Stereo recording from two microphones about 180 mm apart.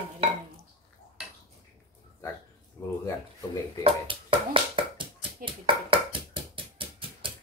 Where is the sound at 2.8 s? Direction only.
20° left (ahead or behind).